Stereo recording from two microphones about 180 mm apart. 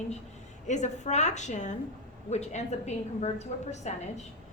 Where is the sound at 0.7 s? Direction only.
40° left (ahead or behind).